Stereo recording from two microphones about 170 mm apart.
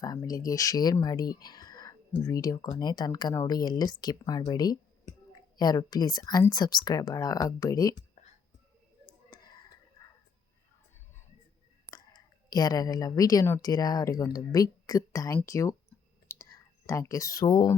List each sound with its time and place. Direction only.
0.0 s speech: 20° left (ahead or behind)
11.9 s a woman's voice: 25° left (ahead or behind)
16.3 s whispering: 15° left (ahead or behind)